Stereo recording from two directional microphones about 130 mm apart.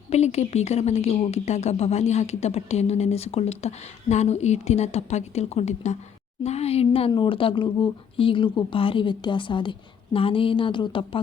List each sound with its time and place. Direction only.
0.1 s a woman's voice: 55° left (ahead or behind); by 11.2 s 40° left (ahead or behind)